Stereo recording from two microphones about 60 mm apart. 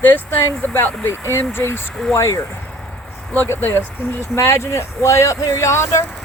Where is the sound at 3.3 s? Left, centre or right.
Left.